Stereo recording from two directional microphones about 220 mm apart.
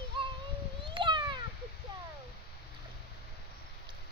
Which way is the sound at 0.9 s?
20° right (ahead or behind).